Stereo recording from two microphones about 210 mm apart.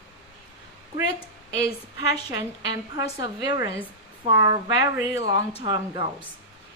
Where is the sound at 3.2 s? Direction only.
20° right (ahead or behind).